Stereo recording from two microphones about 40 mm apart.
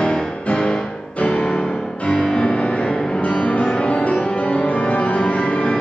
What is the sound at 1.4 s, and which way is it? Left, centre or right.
Music, centre.